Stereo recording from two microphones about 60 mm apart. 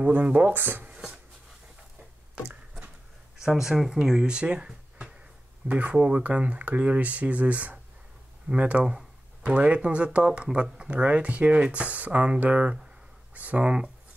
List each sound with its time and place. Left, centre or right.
0.0 s speech: right
0.9 s a sound: centre
3.4 s speech: centre; by 13.8 s right